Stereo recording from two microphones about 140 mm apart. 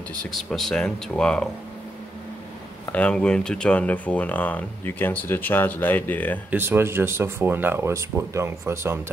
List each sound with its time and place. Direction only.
0.2 s speech: centre (ahead or behind)
2.9 s speech: 10° left (ahead or behind)
6.5 s speech: 15° right (ahead or behind)